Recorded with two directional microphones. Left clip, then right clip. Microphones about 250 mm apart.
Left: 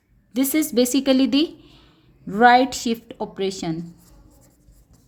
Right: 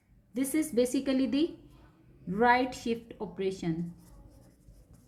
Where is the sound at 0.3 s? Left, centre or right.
Left.